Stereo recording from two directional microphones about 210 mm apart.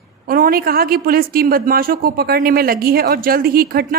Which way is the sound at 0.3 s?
45° right (ahead or behind).